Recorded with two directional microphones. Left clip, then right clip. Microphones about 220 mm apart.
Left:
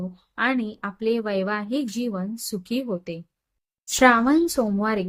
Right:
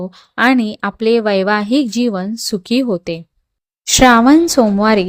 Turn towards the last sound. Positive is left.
turn(degrees=-35)  # may be behind; listen again after turning